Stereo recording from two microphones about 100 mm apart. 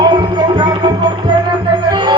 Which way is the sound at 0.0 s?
50° right (ahead or behind).